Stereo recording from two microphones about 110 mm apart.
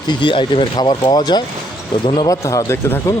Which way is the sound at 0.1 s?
50° left (ahead or behind).